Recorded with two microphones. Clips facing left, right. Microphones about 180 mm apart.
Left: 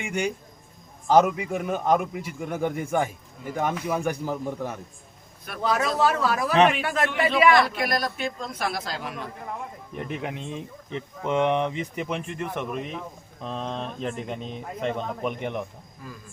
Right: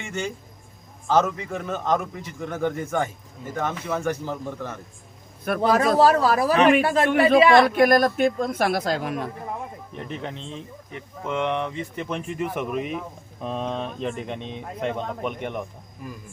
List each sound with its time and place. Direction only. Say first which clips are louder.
0.0 s a man's voice: left 2 dB; 15° left (ahead or behind)
5.5 s speech: right 6 dB; 55° right (ahead or behind)
6.0 s speech: right 5 dB; 35° right (ahead or behind)
7.1 s a man's voice: right 7 dB; 50° right (ahead or behind)
7.3 s speech: right 3 dB; 30° right (ahead or behind)
7.7 s a man's voice: right 10 dB; 50° right (ahead or behind)
10.0 s a man's voice: left 2 dB; 10° left (ahead or behind)
12.2 s speech: right 3 dB; 5° right (ahead or behind)
16.0 s speech: right 4 dB; 15° right (ahead or behind)